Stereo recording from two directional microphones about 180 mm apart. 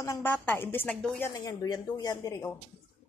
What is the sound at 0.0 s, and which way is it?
A woman's voice, 15° left (ahead or behind).